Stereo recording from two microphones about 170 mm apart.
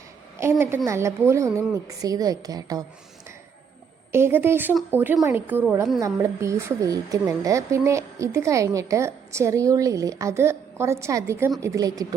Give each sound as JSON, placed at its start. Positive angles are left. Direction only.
{"t": 0.9, "sound": "a woman's voice", "side_deg": -15}
{"t": 4.1, "sound": "a woman's voice", "side_deg": -15}
{"t": 6.0, "sound": "a woman's voice", "side_deg": -20}